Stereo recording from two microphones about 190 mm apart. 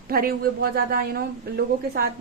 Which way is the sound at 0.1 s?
50° right (ahead or behind).